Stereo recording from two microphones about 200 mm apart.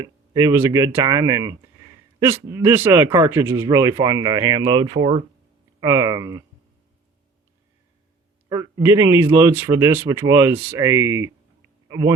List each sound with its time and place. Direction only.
0.0 s speech: 15° right (ahead or behind)
8.4 s speech: 15° right (ahead or behind)